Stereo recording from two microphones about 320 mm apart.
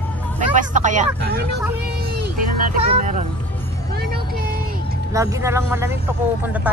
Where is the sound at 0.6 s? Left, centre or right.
Right.